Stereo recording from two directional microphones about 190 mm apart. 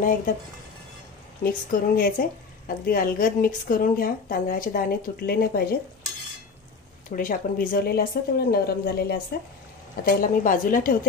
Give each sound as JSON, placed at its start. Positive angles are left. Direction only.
{"t": 1.4, "sound": "speech", "side_deg": 50}
{"t": 7.1, "sound": "speech", "side_deg": 45}